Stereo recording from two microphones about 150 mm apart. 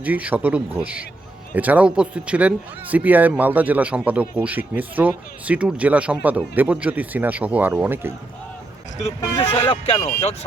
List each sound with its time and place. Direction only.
0.0 s speech: 10° right (ahead or behind)
9.6 s speech: 40° left (ahead or behind)